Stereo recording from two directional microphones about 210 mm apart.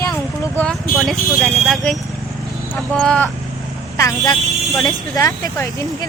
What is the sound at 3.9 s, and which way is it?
Speech, 15° left (ahead or behind).